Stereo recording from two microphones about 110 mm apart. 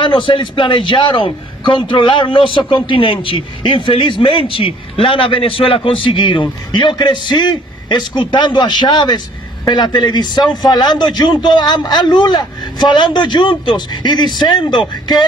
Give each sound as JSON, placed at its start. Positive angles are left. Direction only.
{"t": 0.0, "sound": "a man's voice", "side_deg": 50}